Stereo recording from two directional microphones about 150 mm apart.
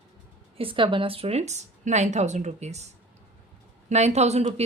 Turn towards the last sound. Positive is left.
turn(degrees=-45)  # may be behind; listen again after turning